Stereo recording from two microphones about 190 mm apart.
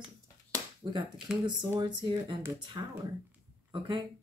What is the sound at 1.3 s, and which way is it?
Speech, centre (ahead or behind).